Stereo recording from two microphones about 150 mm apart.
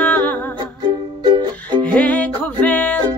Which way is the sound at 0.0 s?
10° left (ahead or behind).